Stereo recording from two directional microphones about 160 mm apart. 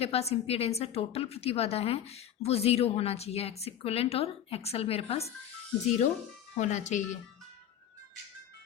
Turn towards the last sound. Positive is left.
turn(degrees=50)  # may be behind; listen again after turning